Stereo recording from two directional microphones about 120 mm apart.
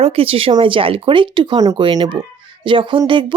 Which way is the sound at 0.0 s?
55° right (ahead or behind).